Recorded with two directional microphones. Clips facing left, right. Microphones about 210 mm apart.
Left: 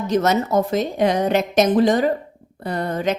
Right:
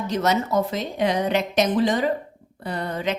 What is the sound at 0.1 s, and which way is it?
Speech, 45° left (ahead or behind).